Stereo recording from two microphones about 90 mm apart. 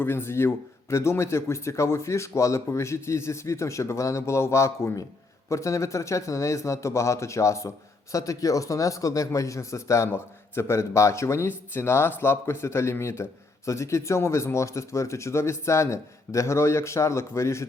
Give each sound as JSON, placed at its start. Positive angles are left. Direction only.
{"t": 0.0, "sound": "a man's voice", "side_deg": 25}